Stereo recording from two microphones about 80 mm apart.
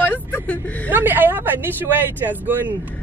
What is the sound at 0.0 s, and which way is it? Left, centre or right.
Vehicle, centre.